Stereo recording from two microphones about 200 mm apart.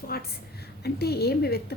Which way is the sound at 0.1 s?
50° left (ahead or behind).